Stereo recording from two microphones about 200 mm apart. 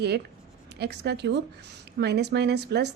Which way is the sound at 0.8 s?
55° right (ahead or behind).